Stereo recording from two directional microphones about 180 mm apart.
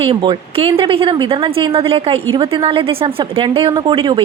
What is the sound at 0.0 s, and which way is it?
A woman's voice, 25° right (ahead or behind).